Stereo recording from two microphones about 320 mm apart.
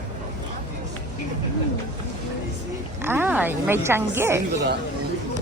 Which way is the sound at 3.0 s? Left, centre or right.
Centre.